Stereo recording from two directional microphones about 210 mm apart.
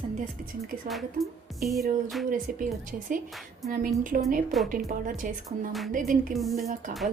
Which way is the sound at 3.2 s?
Centre (ahead or behind).